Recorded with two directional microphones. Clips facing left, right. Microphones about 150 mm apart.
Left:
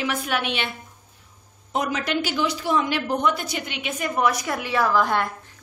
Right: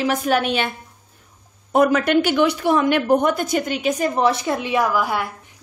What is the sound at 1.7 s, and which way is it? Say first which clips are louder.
A woman's voice: right 9 dB; 55° right (ahead or behind).